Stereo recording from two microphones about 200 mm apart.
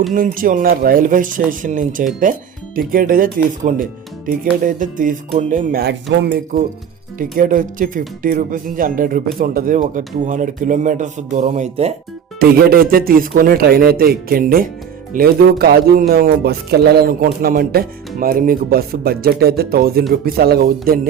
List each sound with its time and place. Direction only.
0.1 s speech: 45° right (ahead or behind)
12.4 s speech: 50° right (ahead or behind)